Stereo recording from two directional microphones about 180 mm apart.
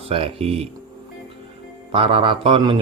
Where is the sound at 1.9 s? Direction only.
30° right (ahead or behind).